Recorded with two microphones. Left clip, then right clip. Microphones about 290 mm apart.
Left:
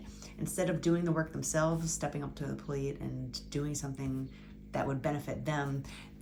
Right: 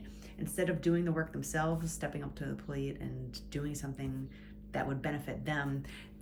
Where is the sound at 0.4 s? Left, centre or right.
Centre.